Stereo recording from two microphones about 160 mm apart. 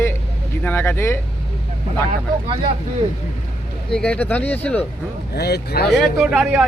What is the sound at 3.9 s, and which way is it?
Speech, 5° left (ahead or behind).